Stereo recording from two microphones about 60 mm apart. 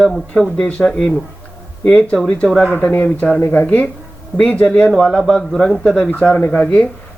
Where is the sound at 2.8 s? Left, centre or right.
Left.